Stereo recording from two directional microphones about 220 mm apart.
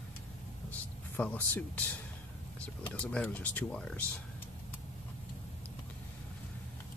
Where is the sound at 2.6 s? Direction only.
5° left (ahead or behind).